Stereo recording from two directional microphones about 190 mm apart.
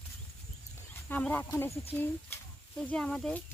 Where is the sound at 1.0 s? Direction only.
10° left (ahead or behind).